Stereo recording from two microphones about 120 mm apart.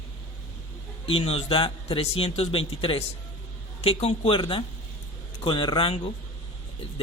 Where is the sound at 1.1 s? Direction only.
55° left (ahead or behind).